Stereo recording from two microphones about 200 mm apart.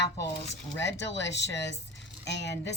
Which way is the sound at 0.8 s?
60° left (ahead or behind).